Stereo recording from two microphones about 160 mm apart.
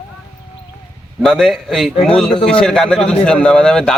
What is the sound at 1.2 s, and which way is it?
A man's voice, centre (ahead or behind).